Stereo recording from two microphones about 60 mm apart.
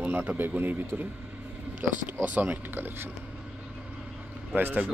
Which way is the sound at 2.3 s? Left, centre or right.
Right.